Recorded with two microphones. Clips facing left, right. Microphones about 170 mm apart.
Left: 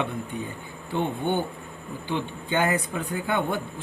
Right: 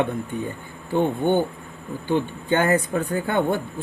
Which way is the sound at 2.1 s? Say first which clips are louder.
Right 6 dB; 50° right (ahead or behind).